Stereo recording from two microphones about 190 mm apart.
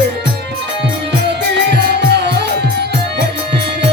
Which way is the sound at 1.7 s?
60° right (ahead or behind).